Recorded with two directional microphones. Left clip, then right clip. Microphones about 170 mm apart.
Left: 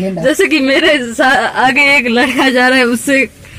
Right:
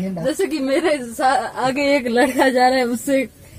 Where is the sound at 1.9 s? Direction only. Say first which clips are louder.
Left 7 dB; 25° right (ahead or behind).